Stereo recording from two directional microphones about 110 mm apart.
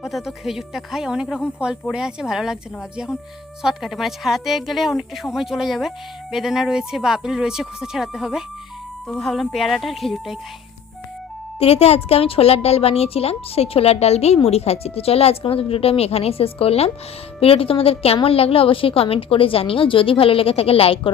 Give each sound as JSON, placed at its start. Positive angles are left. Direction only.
{"t": 0.0, "sound": "speech", "side_deg": -5}
{"t": 3.6, "sound": "speech", "side_deg": -5}
{"t": 11.6, "sound": "a woman's voice", "side_deg": 65}